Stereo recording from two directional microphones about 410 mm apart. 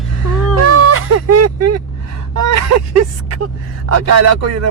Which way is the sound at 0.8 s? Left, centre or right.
Right.